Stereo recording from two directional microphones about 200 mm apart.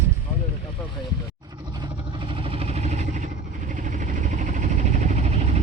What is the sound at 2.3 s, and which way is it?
Vehicle, 25° right (ahead or behind).